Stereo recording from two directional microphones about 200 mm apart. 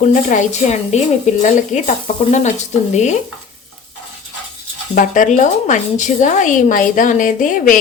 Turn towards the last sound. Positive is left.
turn(degrees=40)  # may be behind; listen again after turning